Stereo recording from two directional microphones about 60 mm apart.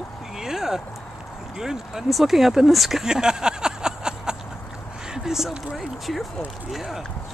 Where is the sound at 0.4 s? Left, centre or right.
Centre.